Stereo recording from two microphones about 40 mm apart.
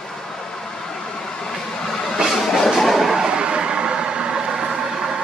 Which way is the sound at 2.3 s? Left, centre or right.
Centre.